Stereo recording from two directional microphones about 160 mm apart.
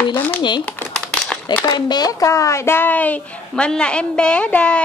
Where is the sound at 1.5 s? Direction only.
25° left (ahead or behind); by 4.8 s 10° left (ahead or behind).